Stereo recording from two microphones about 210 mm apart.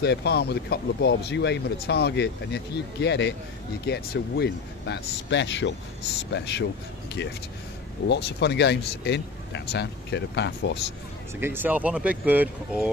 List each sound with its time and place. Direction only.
0.0 s speech: 50° left (ahead or behind)
8.1 s speech: 55° left (ahead or behind)
11.3 s speech: 10° right (ahead or behind)